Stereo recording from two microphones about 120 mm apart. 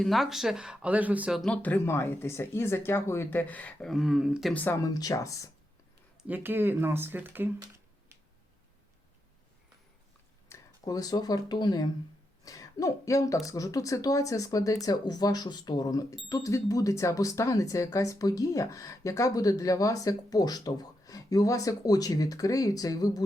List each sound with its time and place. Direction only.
0.0 s speech: centre (ahead or behind)
1.3 s speech: centre (ahead or behind)
1.6 s speech: 20° left (ahead or behind)
3.9 s speech: 5° right (ahead or behind)
4.5 s speech: 15° left (ahead or behind)
4.8 s speech: 30° left (ahead or behind)
6.2 s speech: 15° right (ahead or behind)
10.5 s speech: 30° left (ahead or behind)